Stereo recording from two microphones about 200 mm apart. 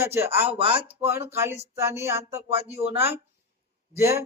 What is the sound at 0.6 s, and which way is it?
Speech, 25° right (ahead or behind).